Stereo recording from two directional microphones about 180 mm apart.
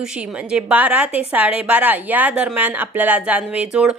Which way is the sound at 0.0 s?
5° right (ahead or behind).